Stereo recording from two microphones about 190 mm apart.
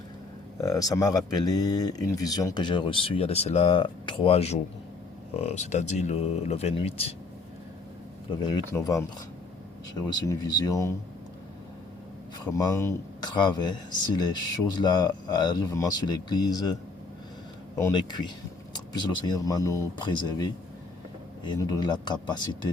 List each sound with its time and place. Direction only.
0.6 s speech: 20° left (ahead or behind)
8.4 s speech: 20° left (ahead or behind)
12.5 s speech: 15° left (ahead or behind)
17.7 s speech: 20° left (ahead or behind)